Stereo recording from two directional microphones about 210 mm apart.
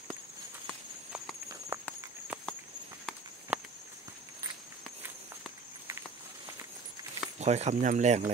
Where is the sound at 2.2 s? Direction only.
5° right (ahead or behind).